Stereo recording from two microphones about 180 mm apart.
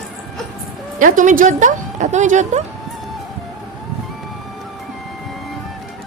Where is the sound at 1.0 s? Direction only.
45° right (ahead or behind).